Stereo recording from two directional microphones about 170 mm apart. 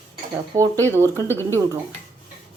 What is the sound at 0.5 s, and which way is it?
Speech, 20° right (ahead or behind).